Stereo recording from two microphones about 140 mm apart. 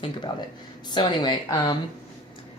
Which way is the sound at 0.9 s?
30° left (ahead or behind).